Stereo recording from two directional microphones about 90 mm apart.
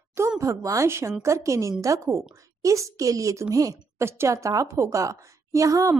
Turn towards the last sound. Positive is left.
turn(degrees=-35)  # may be behind; listen again after turning